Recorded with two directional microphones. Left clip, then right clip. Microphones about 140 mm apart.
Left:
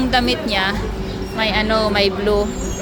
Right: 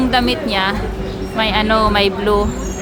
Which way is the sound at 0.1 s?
15° right (ahead or behind).